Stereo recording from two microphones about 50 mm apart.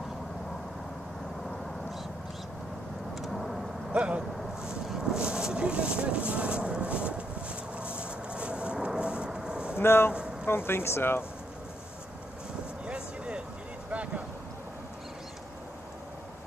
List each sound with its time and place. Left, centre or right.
3.2 s vehicle: centre
3.9 s vehicle: right
8.0 s a sound: right
9.8 s speech: left
12.8 s vehicle: centre
13.8 s vehicle: right